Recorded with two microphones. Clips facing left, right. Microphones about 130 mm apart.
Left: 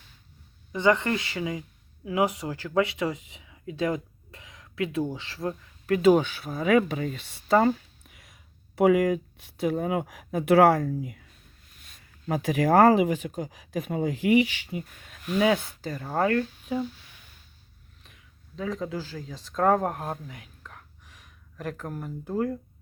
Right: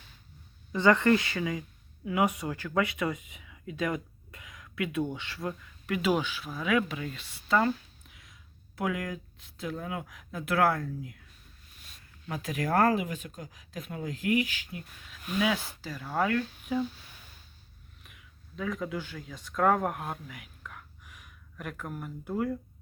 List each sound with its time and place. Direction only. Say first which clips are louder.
0.7 s speech: even; 20° left (ahead or behind); by 10.9 s 75° left (ahead or behind)
12.3 s speech: left 8 dB; 65° left (ahead or behind)
15.0 s speech: left 6 dB; 50° left (ahead or behind); by 16.8 s 30° left (ahead or behind)
18.0 s speech: even; 30° left (ahead or behind)